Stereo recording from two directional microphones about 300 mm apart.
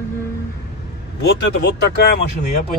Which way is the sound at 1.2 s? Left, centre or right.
Left.